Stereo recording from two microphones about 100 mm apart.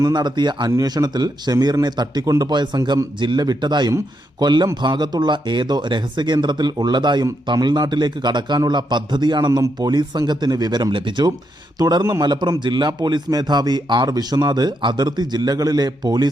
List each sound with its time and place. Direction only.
0.0 s a man's voice: 45° right (ahead or behind)